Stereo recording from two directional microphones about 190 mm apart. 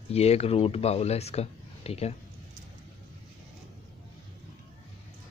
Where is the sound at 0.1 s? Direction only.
35° left (ahead or behind).